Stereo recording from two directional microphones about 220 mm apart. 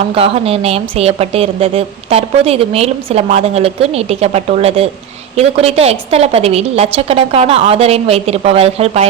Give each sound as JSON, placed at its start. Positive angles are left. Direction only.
{"t": 0.1, "sound": "a woman's voice", "side_deg": -25}